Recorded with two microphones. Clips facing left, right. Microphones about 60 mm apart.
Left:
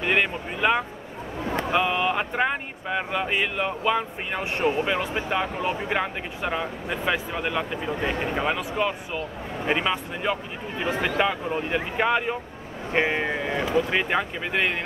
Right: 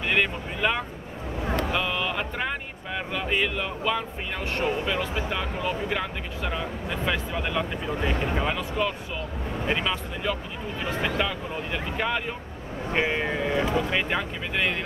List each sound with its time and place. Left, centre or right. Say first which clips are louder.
0.0 s vehicle: left 2 dB; centre
1.6 s speech: left 6 dB; centre